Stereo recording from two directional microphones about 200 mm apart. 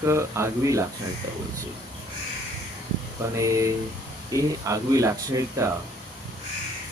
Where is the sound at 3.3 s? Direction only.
15° right (ahead or behind).